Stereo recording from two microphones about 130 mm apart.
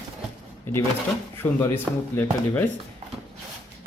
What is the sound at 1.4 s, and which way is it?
Speech, 15° left (ahead or behind).